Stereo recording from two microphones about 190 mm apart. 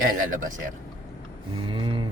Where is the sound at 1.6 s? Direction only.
25° right (ahead or behind).